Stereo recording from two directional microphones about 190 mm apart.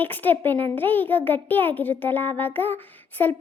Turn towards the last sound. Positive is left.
turn(degrees=10)  # may be behind; listen again after turning